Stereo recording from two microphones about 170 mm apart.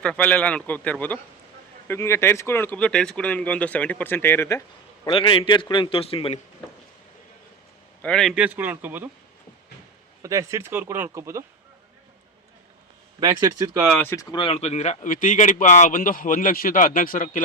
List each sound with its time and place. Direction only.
0.0 s speech: 5° left (ahead or behind)
5.0 s a man's voice: 30° left (ahead or behind)
8.0 s speech: 5° left (ahead or behind)
10.2 s speech: 20° right (ahead or behind)
13.1 s speech: 20° right (ahead or behind)
13.7 s speech: 5° right (ahead or behind)
14.0 s speech: 15° left (ahead or behind); by 17.4 s 50° left (ahead or behind)